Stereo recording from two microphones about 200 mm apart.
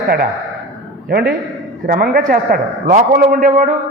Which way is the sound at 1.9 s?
45° right (ahead or behind).